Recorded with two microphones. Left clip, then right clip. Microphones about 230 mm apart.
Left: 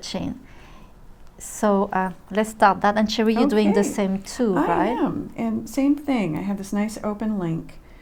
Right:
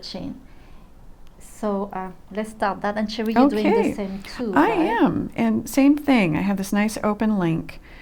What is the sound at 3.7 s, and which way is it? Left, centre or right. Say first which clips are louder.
Speech: right 1 dB; left.